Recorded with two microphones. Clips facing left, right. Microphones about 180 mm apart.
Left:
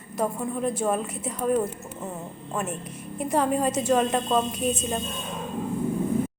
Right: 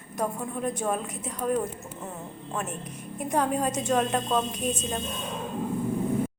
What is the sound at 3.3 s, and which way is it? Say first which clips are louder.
A woman's voice: left 3 dB; 5° left (ahead or behind).